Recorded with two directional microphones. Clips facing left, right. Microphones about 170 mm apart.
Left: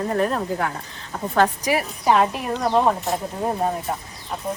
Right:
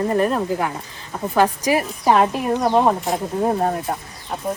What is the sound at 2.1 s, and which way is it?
Speech, 15° right (ahead or behind).